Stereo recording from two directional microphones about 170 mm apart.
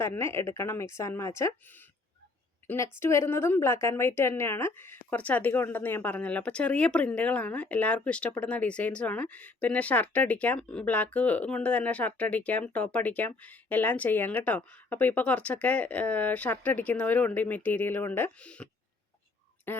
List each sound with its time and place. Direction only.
0.0 s a woman's voice: 15° left (ahead or behind)
2.6 s a woman's voice: 15° left (ahead or behind)